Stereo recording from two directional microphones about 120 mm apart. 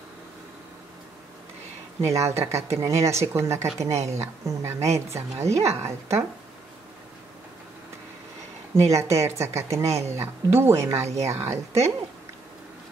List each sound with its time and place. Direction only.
2.0 s speech: 25° right (ahead or behind)
8.9 s speech: 25° right (ahead or behind)